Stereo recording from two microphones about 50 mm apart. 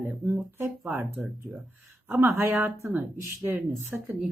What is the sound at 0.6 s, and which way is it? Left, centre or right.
Speech, right.